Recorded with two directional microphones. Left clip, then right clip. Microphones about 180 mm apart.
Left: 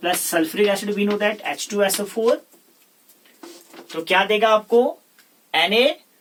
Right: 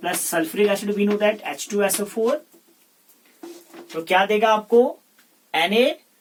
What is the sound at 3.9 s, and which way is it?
Speech, 20° left (ahead or behind).